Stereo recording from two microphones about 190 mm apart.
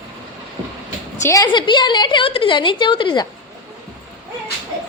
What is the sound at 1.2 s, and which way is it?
A woman's voice, 15° left (ahead or behind).